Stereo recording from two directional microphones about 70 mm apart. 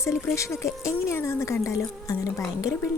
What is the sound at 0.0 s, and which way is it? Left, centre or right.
Speech, left.